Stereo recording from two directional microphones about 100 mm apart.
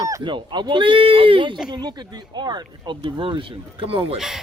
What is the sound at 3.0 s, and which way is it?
Speech, 55° right (ahead or behind).